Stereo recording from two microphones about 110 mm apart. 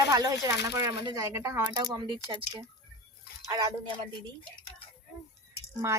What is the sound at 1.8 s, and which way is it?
Speech, 45° right (ahead or behind).